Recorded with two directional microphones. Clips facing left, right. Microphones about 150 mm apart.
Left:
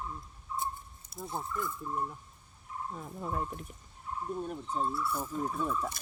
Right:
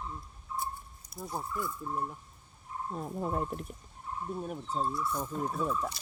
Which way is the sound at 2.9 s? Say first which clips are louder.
Right 5 dB; 35° right (ahead or behind).